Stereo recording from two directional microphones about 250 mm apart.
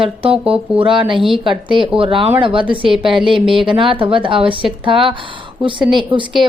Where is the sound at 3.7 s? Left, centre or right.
Right.